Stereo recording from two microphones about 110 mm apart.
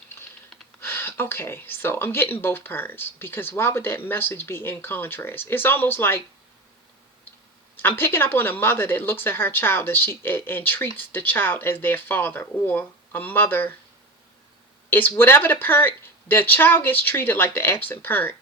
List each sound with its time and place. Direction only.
0.8 s a woman's voice: 20° left (ahead or behind)
7.8 s a woman's voice: 20° left (ahead or behind)
14.8 s a woman's voice: 20° left (ahead or behind)